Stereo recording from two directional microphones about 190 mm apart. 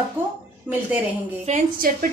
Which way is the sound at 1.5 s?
50° right (ahead or behind).